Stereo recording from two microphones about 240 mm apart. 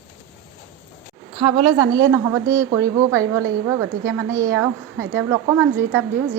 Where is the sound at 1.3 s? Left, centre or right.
Centre.